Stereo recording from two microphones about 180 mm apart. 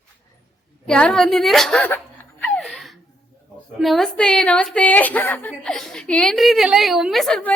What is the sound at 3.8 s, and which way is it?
A woman's voice, centre (ahead or behind).